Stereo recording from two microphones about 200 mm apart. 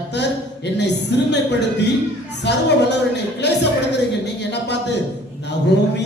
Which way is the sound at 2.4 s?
60° left (ahead or behind).